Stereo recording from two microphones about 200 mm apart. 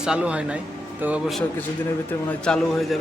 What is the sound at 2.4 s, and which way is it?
Speech, 5° left (ahead or behind).